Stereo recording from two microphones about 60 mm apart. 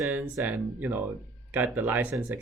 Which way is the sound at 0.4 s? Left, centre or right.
Right.